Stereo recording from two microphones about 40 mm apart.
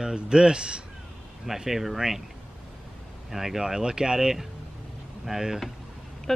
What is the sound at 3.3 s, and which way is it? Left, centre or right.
Speech, centre.